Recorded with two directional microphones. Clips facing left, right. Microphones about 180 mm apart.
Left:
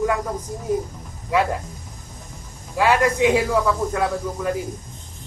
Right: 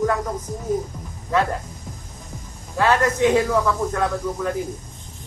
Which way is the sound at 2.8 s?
10° left (ahead or behind).